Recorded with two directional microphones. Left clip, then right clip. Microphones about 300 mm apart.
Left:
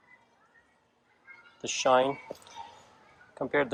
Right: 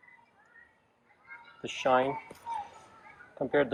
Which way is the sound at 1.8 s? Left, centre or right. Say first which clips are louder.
Left 2 dB; centre.